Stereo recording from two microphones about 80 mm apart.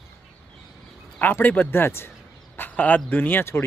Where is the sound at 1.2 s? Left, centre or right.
Left.